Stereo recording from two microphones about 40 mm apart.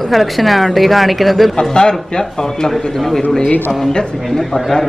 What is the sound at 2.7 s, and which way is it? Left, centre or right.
A man's voice, centre.